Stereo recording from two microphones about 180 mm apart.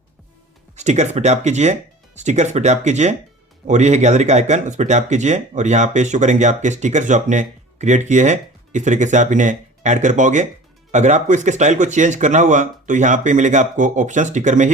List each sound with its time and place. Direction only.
0.8 s speech: 40° right (ahead or behind)